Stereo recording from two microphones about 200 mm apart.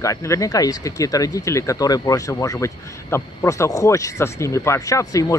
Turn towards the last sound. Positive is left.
turn(degrees=15)  # may be behind; listen again after turning